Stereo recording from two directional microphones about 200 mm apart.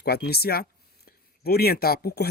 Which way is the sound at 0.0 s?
50° left (ahead or behind).